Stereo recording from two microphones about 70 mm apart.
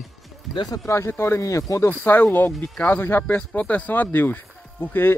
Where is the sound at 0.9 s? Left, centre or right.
Left.